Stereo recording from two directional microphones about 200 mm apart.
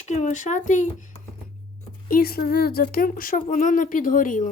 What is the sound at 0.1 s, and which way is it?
Speech, 40° left (ahead or behind).